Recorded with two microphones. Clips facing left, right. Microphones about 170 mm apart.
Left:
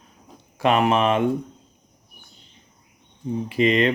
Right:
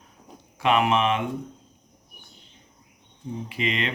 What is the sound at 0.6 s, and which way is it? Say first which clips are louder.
Speech: left 3 dB; 40° left (ahead or behind).